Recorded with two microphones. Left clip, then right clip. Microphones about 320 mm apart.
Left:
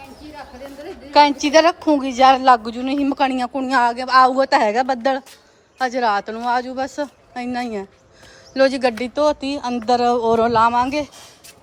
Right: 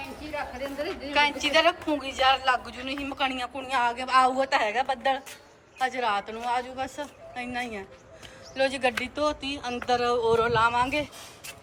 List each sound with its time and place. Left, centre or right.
1.1 s a woman's voice: centre
3.4 s a woman's voice: left
3.7 s a woman's voice: centre
4.4 s a woman's voice: left
5.8 s a woman's voice: centre
8.5 s a woman's voice: centre
8.9 s a woman's voice: left
9.1 s a woman's voice: centre